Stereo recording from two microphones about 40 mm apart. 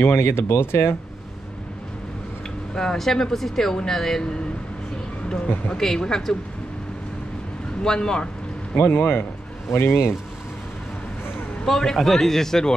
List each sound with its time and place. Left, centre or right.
0.0 s speech: left
2.7 s speech: centre
5.3 s speech: centre
7.8 s speech: centre
8.8 s a man's voice: left
9.8 s speech: left
11.6 s speech: centre